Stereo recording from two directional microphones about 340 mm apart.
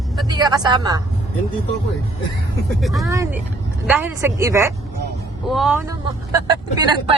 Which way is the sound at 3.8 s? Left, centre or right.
Centre.